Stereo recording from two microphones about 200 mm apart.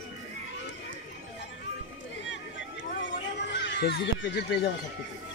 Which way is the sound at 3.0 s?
65° left (ahead or behind).